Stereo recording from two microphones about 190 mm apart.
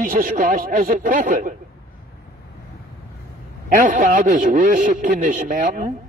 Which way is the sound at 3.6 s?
45° right (ahead or behind).